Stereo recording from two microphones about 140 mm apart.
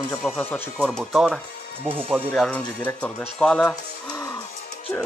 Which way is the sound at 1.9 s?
15° right (ahead or behind).